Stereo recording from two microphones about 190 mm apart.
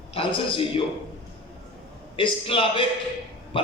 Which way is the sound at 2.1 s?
30° left (ahead or behind).